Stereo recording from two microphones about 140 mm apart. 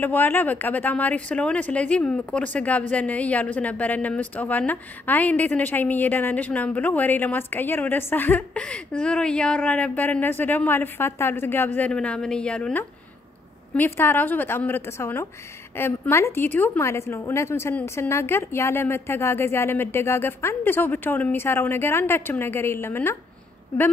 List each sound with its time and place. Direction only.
0.0 s a woman's voice: 15° left (ahead or behind)